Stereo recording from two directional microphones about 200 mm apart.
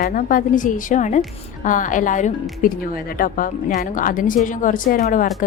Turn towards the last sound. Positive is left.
turn(degrees=45)  # may be behind; listen again after turning